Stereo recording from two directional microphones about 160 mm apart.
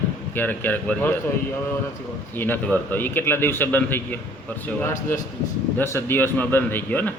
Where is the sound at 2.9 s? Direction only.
15° left (ahead or behind).